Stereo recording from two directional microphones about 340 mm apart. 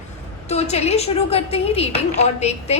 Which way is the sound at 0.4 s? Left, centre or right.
Centre.